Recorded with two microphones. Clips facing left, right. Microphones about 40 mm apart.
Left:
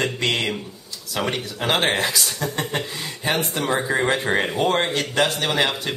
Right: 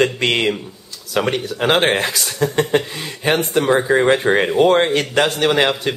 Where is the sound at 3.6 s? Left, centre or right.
Centre; by 5.7 s right.